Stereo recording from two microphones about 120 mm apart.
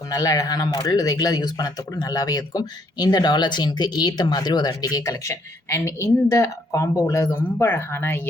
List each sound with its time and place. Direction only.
0.1 s speech: 30° left (ahead or behind)